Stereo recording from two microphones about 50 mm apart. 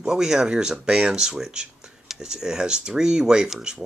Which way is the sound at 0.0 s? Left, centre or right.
Centre.